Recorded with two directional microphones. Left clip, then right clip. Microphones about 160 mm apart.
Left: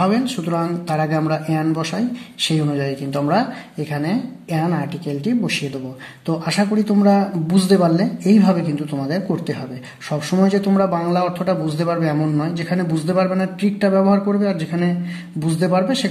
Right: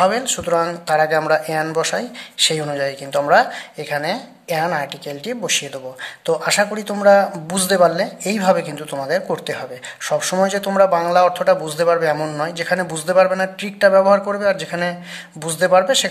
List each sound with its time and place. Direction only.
0.0 s a man's voice: 35° right (ahead or behind)